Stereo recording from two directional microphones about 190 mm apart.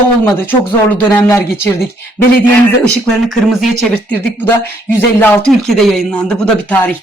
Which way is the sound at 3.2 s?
Centre (ahead or behind).